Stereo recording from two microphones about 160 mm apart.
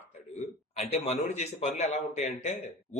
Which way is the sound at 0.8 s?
45° left (ahead or behind).